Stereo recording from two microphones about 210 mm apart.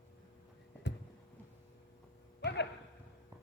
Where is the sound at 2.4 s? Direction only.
55° left (ahead or behind).